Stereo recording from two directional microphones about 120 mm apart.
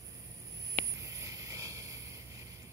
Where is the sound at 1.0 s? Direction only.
25° right (ahead or behind).